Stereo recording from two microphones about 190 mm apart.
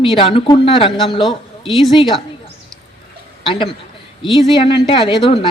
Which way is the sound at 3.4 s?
25° left (ahead or behind).